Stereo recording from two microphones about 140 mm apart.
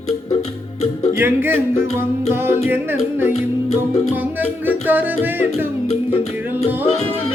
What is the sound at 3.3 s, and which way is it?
Music, 50° left (ahead or behind).